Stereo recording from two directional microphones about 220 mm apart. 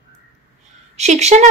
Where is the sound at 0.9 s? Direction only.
30° right (ahead or behind).